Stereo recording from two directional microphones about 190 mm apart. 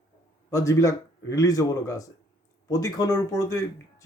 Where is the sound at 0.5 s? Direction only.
15° left (ahead or behind).